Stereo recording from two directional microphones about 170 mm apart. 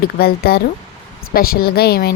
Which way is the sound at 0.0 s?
65° left (ahead or behind).